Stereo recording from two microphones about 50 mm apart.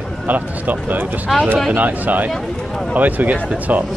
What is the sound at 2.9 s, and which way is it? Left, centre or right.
Speech, right.